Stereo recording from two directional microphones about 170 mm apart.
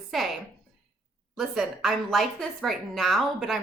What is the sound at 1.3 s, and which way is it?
A woman's voice, centre (ahead or behind).